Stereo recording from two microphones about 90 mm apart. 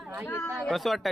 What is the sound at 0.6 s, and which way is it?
Speech, centre (ahead or behind).